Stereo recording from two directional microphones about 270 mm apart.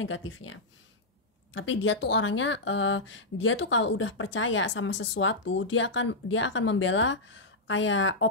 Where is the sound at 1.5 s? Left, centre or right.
Left.